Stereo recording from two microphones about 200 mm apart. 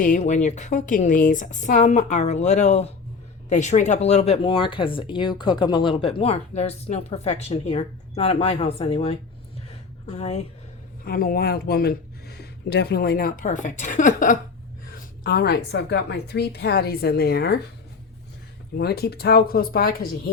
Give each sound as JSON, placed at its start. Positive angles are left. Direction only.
{"t": 0.0, "sound": "a woman's voice", "side_deg": 40}
{"t": 9.6, "sound": "a sound", "side_deg": 30}
{"t": 11.0, "sound": "a woman's voice", "side_deg": 50}
{"t": 18.8, "sound": "speech", "side_deg": 50}